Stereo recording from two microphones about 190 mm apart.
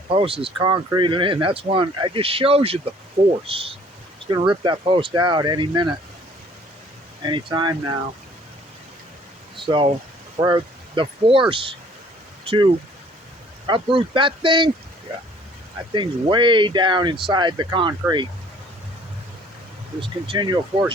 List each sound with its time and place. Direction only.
0.1 s speech: 30° right (ahead or behind)
7.2 s speech: 25° right (ahead or behind)
9.6 s speech: 25° right (ahead or behind)
15.9 s speech: 25° right (ahead or behind)
20.0 s speech: 25° right (ahead or behind)